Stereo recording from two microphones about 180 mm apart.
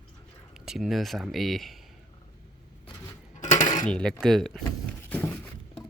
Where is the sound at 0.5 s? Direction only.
Centre (ahead or behind).